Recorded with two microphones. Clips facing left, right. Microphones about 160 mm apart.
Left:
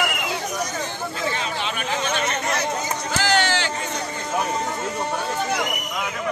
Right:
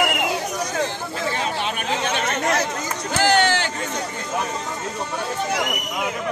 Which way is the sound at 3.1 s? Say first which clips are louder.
Right 4 dB; 55° right (ahead or behind).